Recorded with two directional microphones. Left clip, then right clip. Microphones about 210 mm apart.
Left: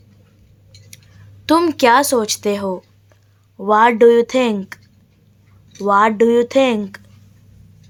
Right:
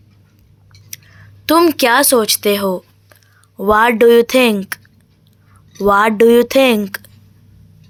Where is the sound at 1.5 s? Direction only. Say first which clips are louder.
Right 1 dB; 5° right (ahead or behind).